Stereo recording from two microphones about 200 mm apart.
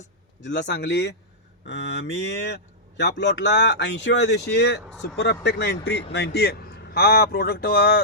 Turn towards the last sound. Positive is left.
turn(degrees=50)  # may be behind; listen again after turning